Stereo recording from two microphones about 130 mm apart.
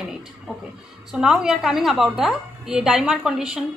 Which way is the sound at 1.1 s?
5° right (ahead or behind).